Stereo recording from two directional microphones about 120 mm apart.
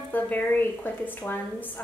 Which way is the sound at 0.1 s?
15° left (ahead or behind).